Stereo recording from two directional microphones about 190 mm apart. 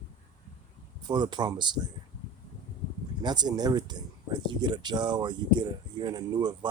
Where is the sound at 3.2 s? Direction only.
20° right (ahead or behind).